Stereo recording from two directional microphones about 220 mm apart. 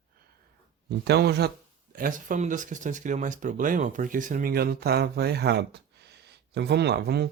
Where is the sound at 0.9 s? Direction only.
45° right (ahead or behind).